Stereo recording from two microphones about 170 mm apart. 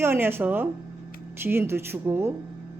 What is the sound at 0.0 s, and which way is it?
A woman's voice, 15° right (ahead or behind).